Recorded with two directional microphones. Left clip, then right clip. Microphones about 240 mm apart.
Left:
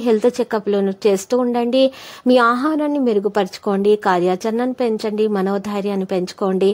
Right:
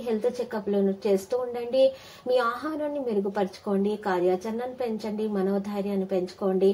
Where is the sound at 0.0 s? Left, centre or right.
Left.